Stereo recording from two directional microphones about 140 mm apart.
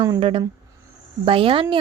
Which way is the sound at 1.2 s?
40° right (ahead or behind).